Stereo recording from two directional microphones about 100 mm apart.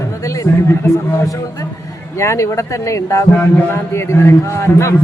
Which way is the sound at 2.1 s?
30° left (ahead or behind).